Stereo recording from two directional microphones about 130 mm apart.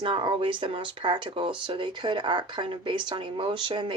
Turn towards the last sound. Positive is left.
turn(degrees=-40)  # may be behind; listen again after turning